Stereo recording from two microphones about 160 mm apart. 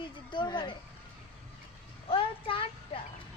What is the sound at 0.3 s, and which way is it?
Speech, 30° left (ahead or behind).